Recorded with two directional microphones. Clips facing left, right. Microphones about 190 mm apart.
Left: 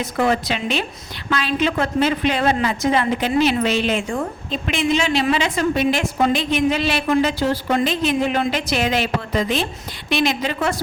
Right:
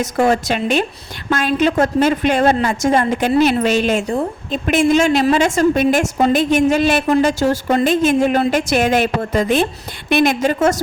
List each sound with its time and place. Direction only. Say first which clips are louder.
0.0 s a woman's voice: right 4 dB; 45° right (ahead or behind)